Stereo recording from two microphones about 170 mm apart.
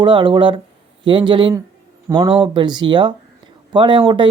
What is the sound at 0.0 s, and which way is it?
Speech, 30° right (ahead or behind).